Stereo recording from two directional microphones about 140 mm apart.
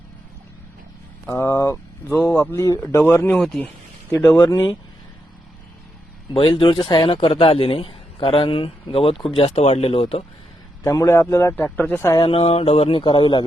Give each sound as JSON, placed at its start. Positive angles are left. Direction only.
{"t": 1.3, "sound": "a man's voice", "side_deg": 20}
{"t": 3.3, "sound": "speech", "side_deg": 0}
{"t": 4.4, "sound": "speech", "side_deg": 30}
{"t": 6.3, "sound": "speech", "side_deg": 40}
{"t": 10.8, "sound": "a man's voice", "side_deg": 20}
{"t": 12.1, "sound": "speech", "side_deg": 40}